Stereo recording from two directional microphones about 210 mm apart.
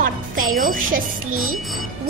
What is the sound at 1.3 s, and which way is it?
Speech, 90° right.